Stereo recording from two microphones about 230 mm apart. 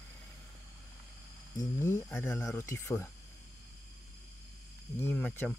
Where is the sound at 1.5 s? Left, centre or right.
Centre.